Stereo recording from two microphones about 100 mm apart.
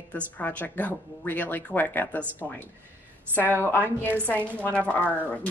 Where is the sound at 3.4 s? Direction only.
20° left (ahead or behind).